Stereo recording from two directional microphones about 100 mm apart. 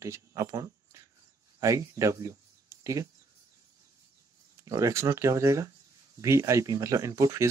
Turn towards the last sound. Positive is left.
turn(degrees=-30)  # may be behind; listen again after turning